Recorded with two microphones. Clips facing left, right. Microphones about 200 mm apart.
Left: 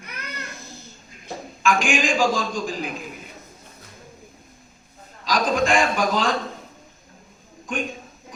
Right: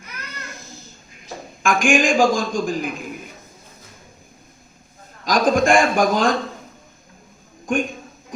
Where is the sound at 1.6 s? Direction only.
50° right (ahead or behind).